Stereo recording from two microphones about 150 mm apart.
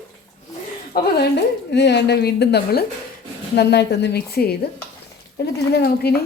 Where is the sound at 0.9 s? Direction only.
90° left.